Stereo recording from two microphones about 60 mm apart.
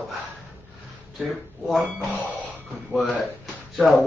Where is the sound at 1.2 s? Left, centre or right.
Centre.